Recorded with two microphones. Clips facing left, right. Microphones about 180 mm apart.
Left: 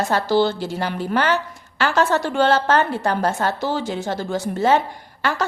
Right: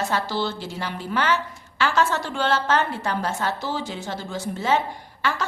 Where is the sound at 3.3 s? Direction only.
55° left (ahead or behind).